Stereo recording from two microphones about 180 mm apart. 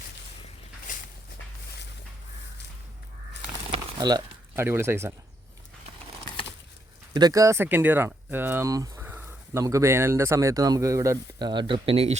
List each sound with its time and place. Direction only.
4.0 s speech: 25° right (ahead or behind)
7.1 s speech: 20° right (ahead or behind)